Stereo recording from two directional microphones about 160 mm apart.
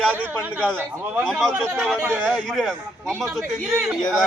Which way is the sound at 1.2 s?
Centre (ahead or behind).